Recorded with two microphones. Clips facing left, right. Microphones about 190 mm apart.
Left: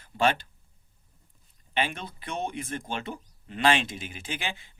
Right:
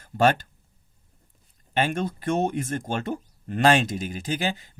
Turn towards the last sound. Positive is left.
turn(degrees=-40)  # may be behind; listen again after turning